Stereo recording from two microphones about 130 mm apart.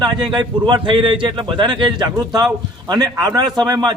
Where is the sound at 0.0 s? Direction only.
35° right (ahead or behind).